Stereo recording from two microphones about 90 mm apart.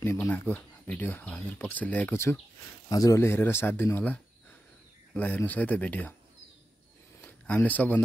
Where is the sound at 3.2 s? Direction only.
30° left (ahead or behind).